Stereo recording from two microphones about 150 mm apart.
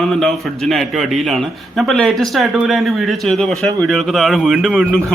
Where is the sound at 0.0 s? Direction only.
Centre (ahead or behind).